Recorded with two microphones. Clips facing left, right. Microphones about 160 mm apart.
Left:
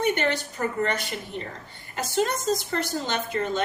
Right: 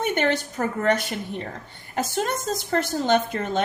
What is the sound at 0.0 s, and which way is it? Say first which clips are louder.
A woman's voice: right 1 dB; 50° right (ahead or behind).